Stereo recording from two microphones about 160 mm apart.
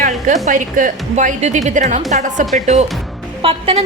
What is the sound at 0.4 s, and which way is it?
A woman's voice, 55° right (ahead or behind).